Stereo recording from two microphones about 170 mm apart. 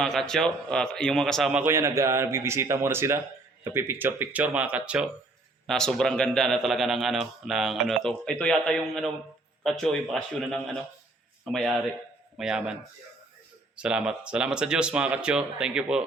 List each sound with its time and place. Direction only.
0.0 s a man's voice: 5° left (ahead or behind)
1.6 s a man's voice: 15° right (ahead or behind)
5.6 s a man's voice: 5° left (ahead or behind)
13.7 s a man's voice: 5° right (ahead or behind)